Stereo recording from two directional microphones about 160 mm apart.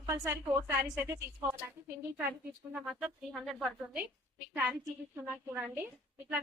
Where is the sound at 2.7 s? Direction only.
5° right (ahead or behind).